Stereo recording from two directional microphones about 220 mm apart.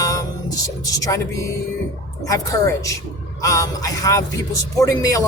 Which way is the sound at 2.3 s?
15° left (ahead or behind).